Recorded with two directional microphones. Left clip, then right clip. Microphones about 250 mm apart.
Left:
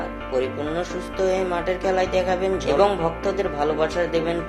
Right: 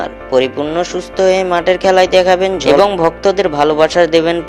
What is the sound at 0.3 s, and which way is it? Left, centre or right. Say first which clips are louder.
Speech: right 11 dB; right.